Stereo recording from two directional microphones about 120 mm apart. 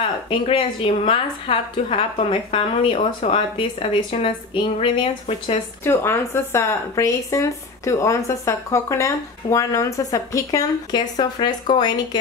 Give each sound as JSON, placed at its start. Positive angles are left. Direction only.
{"t": 0.3, "sound": "a woman's voice", "side_deg": 45}
{"t": 5.9, "sound": "speech", "side_deg": 20}